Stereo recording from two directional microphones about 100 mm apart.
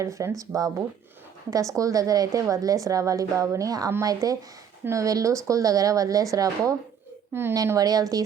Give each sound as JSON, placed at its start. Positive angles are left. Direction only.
{"t": 0.0, "sound": "a woman's voice", "side_deg": -30}